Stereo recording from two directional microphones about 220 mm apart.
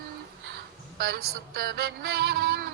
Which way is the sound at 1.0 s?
45° right (ahead or behind).